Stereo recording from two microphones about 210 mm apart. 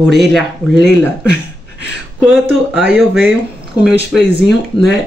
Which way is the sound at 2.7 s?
5° right (ahead or behind).